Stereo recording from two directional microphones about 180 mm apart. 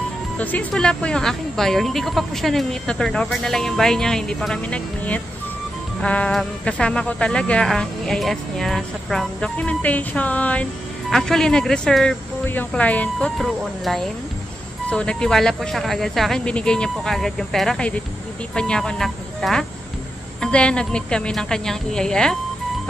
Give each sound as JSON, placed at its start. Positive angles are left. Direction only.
{"t": 0.4, "sound": "speech", "side_deg": 10}